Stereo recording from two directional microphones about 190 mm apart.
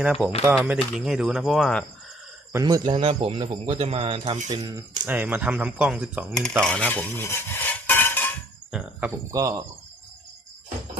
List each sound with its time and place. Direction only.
0.0 s speech: 5° right (ahead or behind)
2.5 s a man's voice: 20° right (ahead or behind); by 4.5 s 40° right (ahead or behind)
5.0 s speech: 10° right (ahead or behind)
6.6 s cutlery: 5° left (ahead or behind)
8.7 s speech: 10° right (ahead or behind)